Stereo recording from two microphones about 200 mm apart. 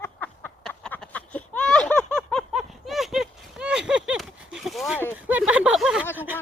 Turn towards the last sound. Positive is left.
turn(degrees=-10)  # may be behind; listen again after turning